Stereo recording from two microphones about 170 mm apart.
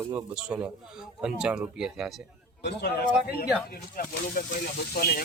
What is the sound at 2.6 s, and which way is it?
Speech, 70° left (ahead or behind).